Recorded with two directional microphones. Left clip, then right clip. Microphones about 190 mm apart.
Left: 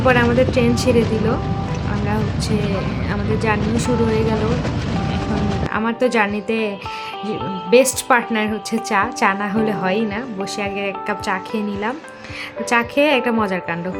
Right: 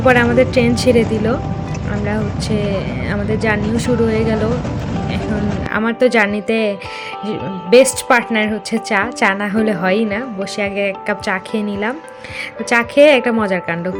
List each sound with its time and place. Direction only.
0.0 s speech: 15° right (ahead or behind)
2.7 s speech: 10° right (ahead or behind)
5.7 s speech: 15° right (ahead or behind)